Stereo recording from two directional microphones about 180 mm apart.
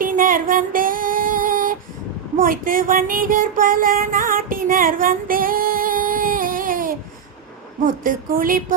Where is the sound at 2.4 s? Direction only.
50° right (ahead or behind).